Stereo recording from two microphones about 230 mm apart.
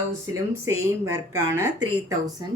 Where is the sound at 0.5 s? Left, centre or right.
Centre.